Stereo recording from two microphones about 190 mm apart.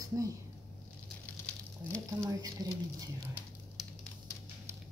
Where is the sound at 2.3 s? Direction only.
20° right (ahead or behind).